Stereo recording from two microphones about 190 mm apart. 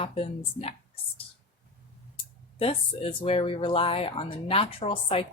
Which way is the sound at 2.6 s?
30° left (ahead or behind).